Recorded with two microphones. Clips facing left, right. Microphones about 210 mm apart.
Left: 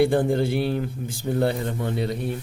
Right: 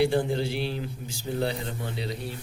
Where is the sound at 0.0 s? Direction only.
50° left (ahead or behind).